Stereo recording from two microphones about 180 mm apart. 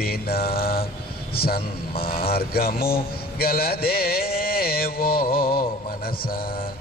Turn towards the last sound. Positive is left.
turn(degrees=55)  # may be behind; listen again after turning